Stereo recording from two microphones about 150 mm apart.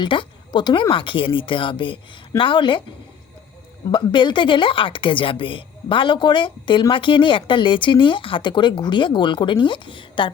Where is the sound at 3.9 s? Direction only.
30° left (ahead or behind).